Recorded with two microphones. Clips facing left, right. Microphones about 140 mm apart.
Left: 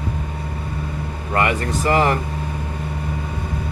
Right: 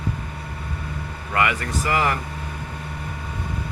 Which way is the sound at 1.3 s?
30° left (ahead or behind).